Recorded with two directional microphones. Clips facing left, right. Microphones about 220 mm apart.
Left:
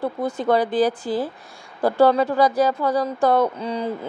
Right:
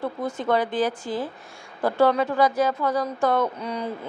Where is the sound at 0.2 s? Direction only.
35° left (ahead or behind).